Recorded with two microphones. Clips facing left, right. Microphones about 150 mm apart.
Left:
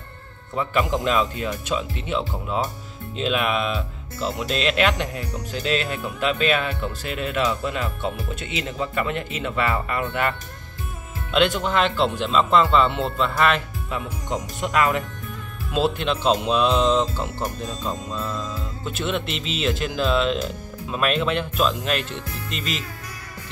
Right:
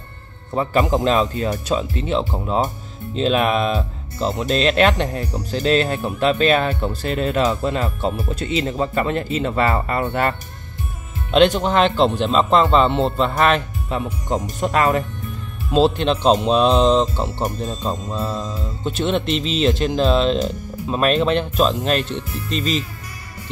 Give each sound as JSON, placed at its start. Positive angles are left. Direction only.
{"t": 0.6, "sound": "speech", "side_deg": -40}
{"t": 11.3, "sound": "speech", "side_deg": -40}